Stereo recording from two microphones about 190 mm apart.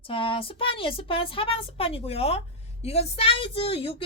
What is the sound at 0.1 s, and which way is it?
A woman's voice, 30° left (ahead or behind).